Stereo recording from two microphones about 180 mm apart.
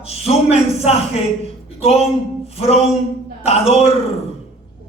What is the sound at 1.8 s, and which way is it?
A man's voice, 35° left (ahead or behind).